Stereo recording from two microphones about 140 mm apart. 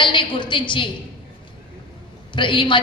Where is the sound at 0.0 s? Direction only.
35° left (ahead or behind).